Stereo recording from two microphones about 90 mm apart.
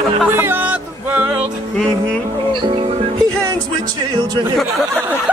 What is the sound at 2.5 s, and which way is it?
Speech, 65° right (ahead or behind).